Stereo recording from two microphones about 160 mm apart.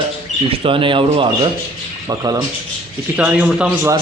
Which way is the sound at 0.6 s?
35° right (ahead or behind).